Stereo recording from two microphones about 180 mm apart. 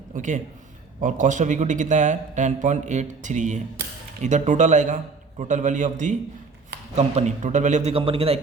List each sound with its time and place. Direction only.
0.1 s a man's voice: 45° right (ahead or behind)